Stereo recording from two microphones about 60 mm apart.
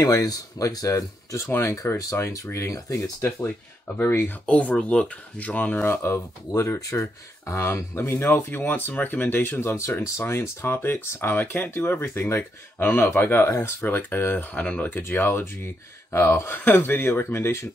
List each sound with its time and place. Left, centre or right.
0.0 s speech: left
1.8 s speech: left
4.0 s speech: left
5.9 s speech: left
6.8 s speech: left
9.6 s speech: left
11.8 s speech: left
15.0 s speech: left